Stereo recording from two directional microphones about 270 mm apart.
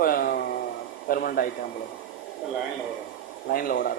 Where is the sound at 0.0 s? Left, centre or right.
Left.